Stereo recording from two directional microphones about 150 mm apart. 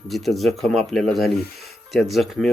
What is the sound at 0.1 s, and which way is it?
Speech, centre (ahead or behind).